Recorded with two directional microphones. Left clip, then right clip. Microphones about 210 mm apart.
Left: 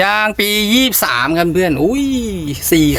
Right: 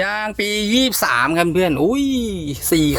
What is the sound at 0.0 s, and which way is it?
Speech, 15° left (ahead or behind).